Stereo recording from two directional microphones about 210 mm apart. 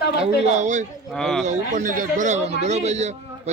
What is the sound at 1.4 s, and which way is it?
A man's voice, 35° right (ahead or behind).